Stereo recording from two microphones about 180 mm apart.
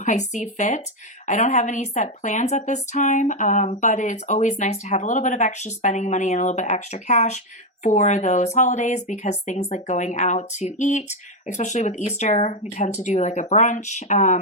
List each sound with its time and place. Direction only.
0.0 s speech: 40° left (ahead or behind)